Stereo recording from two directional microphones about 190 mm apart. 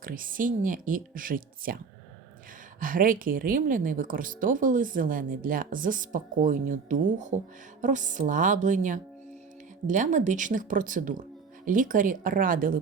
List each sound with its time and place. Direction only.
0.0 s speech: 45° right (ahead or behind)
2.8 s speech: 45° right (ahead or behind)